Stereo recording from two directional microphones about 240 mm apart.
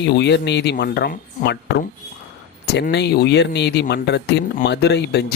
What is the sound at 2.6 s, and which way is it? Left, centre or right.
Speech, left.